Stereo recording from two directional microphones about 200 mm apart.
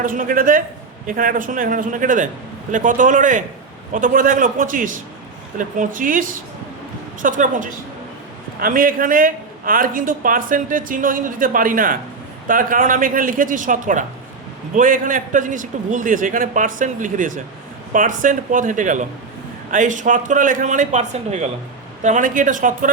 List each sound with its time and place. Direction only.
0.0 s a man's voice: 45° right (ahead or behind)